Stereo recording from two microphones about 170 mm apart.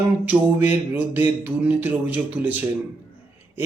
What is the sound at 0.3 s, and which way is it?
A man's voice, 10° right (ahead or behind).